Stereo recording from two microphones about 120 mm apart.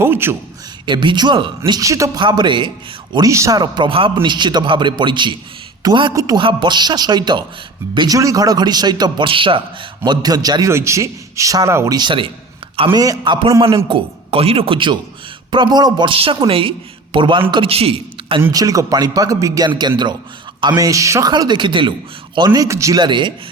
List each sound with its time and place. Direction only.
0.0 s a man's voice: 20° right (ahead or behind)
0.9 s a man's voice: 40° right (ahead or behind)
1.8 s a man's voice: 25° right (ahead or behind)
2.2 s a man's voice: 40° right (ahead or behind)
3.2 s a man's voice: 25° right (ahead or behind)
6.1 s a man's voice: 30° right (ahead or behind)
6.4 s a man's voice: 40° right (ahead or behind)
10.1 s a man's voice: 30° right (ahead or behind)
11.9 s a man's voice: 40° right (ahead or behind)
12.9 s a man's voice: 30° right (ahead or behind); by 18.4 s 50° right (ahead or behind)
18.5 s a man's voice: 30° right (ahead or behind)
23.0 s a man's voice: 40° right (ahead or behind)